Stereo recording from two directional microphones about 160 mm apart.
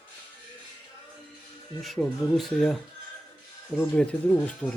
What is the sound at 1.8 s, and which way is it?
Speech, centre (ahead or behind).